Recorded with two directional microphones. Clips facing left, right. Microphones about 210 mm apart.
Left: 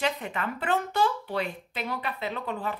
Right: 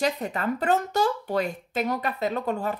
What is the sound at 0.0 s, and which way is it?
Speech, 40° right (ahead or behind).